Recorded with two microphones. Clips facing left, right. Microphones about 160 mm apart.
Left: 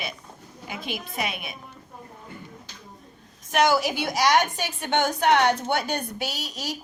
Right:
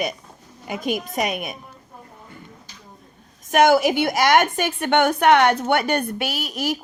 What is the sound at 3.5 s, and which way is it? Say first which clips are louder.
A woman's voice: right 6 dB; 55° right (ahead or behind).